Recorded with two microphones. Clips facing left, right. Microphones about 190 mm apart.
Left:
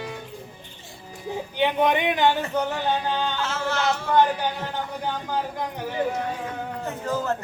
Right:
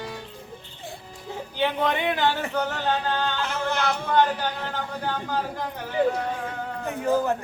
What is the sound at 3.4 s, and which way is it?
Speech, 15° right (ahead or behind).